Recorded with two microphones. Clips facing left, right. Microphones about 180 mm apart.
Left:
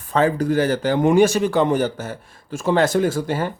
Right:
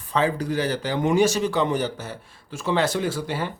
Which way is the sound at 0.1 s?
50° left (ahead or behind).